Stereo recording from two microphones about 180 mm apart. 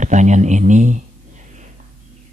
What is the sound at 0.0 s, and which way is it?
Speech, 40° right (ahead or behind).